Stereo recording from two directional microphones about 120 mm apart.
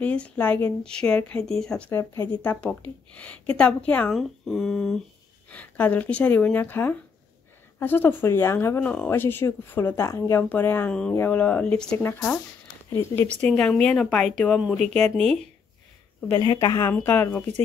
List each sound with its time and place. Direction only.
0.0 s speech: 10° left (ahead or behind)
1.9 s speech: 20° left (ahead or behind)
2.4 s speech: 10° left (ahead or behind)
4.1 s speech: centre (ahead or behind); by 8.8 s 20° left (ahead or behind)
8.8 s speech: 10° left (ahead or behind)
10.9 s speech: 5° left (ahead or behind)
13.4 s speech: 10° left (ahead or behind)
16.3 s speech: 35° left (ahead or behind)
16.9 s speech: 15° left (ahead or behind)